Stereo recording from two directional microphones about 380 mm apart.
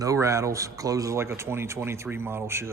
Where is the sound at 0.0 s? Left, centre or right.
Centre.